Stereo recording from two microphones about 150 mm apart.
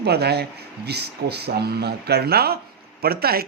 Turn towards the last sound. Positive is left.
turn(degrees=-90)